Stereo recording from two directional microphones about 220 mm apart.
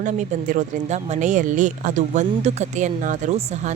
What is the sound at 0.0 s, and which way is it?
Speech, 35° right (ahead or behind).